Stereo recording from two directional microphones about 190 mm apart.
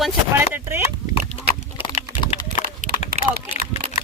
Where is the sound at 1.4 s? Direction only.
30° left (ahead or behind).